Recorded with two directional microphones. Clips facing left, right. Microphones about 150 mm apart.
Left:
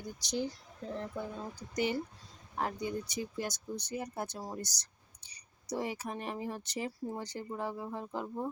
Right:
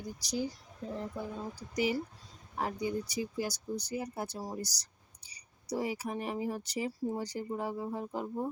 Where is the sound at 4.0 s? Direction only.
10° right (ahead or behind).